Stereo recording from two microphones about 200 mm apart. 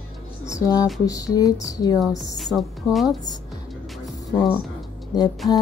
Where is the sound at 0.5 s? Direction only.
15° left (ahead or behind).